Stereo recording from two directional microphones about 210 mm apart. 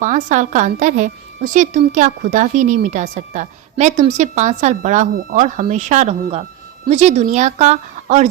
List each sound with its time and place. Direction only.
0.0 s a woman's voice: 35° right (ahead or behind)